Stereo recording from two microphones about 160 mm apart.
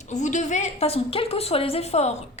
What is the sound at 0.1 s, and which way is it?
A woman's voice, 50° left (ahead or behind).